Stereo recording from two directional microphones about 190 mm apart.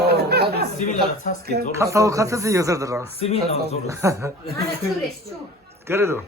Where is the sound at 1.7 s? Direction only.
15° right (ahead or behind).